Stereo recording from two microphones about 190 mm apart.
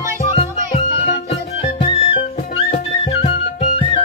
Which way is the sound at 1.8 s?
30° left (ahead or behind).